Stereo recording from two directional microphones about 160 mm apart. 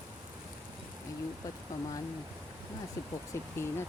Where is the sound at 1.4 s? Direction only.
25° left (ahead or behind).